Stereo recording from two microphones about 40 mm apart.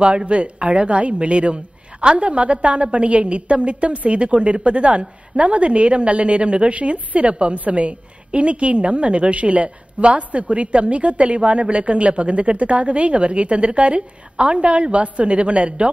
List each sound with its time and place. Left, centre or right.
0.0 s a woman's voice: right